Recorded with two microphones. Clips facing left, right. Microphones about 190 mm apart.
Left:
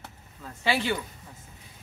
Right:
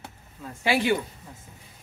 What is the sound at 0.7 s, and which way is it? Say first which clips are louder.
Speech: right 4 dB; 15° right (ahead or behind).